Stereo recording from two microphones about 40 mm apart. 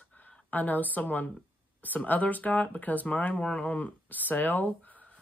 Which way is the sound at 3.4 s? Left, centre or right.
Left.